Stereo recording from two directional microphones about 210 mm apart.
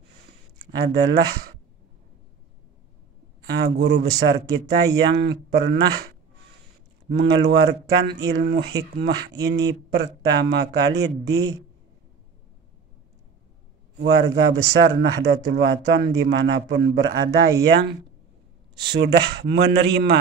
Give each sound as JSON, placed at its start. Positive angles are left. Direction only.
{"t": 0.6, "sound": "speech", "side_deg": -50}
{"t": 3.4, "sound": "speech", "side_deg": -50}
{"t": 7.1, "sound": "speech", "side_deg": -55}
{"t": 14.0, "sound": "speech", "side_deg": -55}